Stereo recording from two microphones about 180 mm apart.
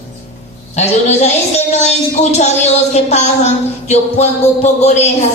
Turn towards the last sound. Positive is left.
turn(degrees=35)  # may be behind; listen again after turning